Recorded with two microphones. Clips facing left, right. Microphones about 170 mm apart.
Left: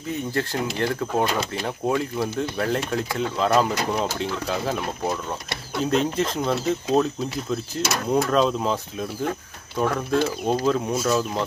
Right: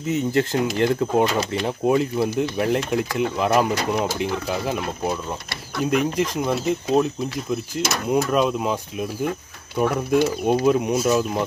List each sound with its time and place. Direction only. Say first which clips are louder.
0.1 s speech: right 5 dB; 20° right (ahead or behind)
5.9 s speech: right 1 dB; 10° right (ahead or behind)
8.1 s speech: even; 10° right (ahead or behind)
9.8 s speech: right 3 dB; 15° right (ahead or behind)